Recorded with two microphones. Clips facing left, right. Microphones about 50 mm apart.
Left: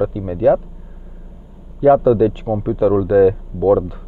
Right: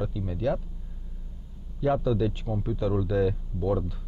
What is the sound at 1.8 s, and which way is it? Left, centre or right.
A man's voice, left.